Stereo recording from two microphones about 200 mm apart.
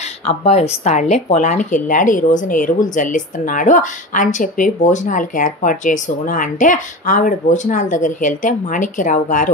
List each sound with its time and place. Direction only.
0.2 s a woman's voice: 30° left (ahead or behind)